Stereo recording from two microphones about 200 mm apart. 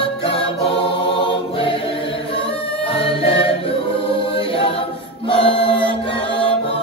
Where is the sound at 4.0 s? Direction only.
25° left (ahead or behind).